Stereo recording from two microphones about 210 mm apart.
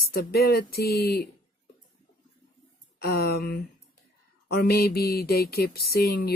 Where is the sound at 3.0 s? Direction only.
45° left (ahead or behind).